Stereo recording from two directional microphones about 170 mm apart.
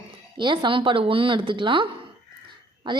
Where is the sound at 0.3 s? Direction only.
30° right (ahead or behind).